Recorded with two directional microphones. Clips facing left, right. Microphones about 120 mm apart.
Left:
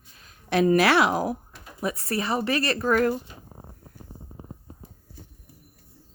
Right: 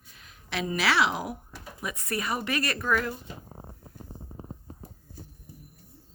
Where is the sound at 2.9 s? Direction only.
45° left (ahead or behind).